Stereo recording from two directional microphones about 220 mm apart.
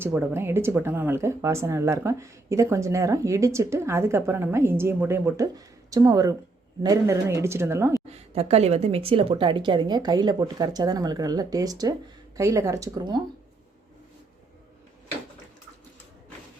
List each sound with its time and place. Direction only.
0.0 s speech: 10° right (ahead or behind)
8.1 s a woman's voice: 30° right (ahead or behind)